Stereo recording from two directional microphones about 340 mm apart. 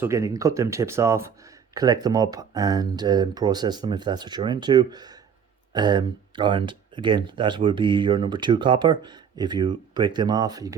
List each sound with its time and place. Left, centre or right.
0.0 s speech: centre